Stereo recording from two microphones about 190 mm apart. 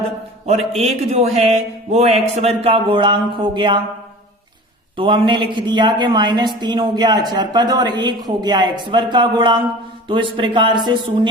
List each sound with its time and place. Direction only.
0.8 s speech: 35° right (ahead or behind)
4.9 s speech: 25° right (ahead or behind)